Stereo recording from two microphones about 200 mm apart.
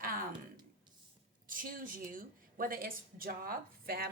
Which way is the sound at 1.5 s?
45° right (ahead or behind).